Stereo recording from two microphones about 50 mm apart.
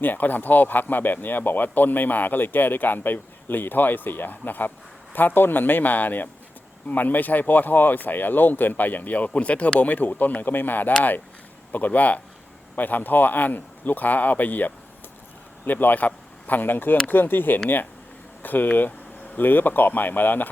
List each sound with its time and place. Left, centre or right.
0.0 s speech: left